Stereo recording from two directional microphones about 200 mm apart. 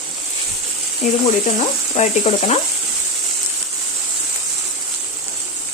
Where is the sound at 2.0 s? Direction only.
35° left (ahead or behind).